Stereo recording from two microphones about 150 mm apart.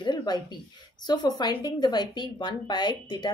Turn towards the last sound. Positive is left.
turn(degrees=30)  # may be behind; listen again after turning